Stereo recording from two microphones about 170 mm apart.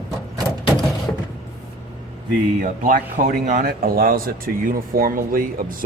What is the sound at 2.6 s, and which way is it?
A man's voice, 55° right (ahead or behind).